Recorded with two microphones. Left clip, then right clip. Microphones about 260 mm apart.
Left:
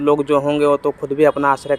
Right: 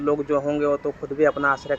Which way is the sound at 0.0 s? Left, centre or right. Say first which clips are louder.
Left 7 dB; left.